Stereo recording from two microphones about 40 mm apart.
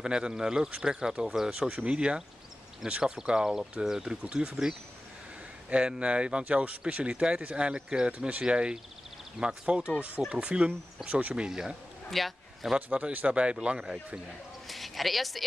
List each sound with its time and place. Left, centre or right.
0.0 s speech: centre
2.8 s speech: centre
4.3 s speech: right
5.7 s speech: right
9.8 s speech: right
11.1 s speech: right
11.3 s speech: centre
12.1 s a sound: centre
12.7 s speech: right
14.7 s a sound: centre